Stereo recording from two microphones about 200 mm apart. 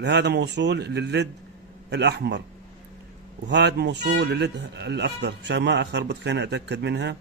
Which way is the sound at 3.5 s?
60° right (ahead or behind).